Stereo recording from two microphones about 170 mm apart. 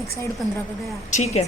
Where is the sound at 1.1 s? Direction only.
40° left (ahead or behind).